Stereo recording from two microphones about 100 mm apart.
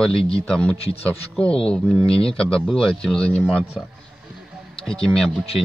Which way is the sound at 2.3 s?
5° left (ahead or behind).